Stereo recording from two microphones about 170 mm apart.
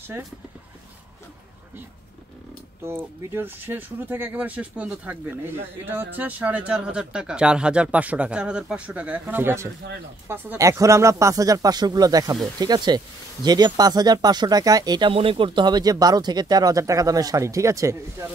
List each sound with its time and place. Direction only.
2.8 s speech: 15° right (ahead or behind)